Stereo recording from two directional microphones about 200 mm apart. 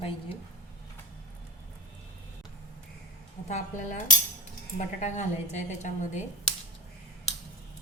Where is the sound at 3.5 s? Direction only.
35° left (ahead or behind).